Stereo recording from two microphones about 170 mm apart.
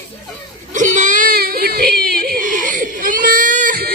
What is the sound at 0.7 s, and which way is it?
Baby cry, 50° right (ahead or behind).